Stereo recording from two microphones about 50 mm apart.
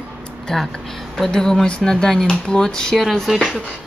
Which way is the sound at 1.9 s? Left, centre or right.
Centre.